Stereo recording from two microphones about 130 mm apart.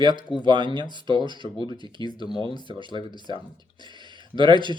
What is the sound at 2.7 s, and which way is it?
Speech, 40° right (ahead or behind).